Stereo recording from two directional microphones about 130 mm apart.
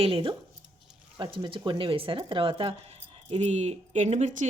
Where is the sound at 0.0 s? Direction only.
45° right (ahead or behind).